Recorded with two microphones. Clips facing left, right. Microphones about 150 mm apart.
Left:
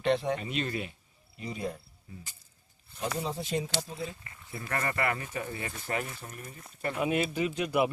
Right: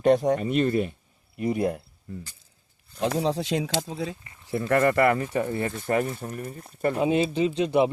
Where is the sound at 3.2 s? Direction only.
85° right.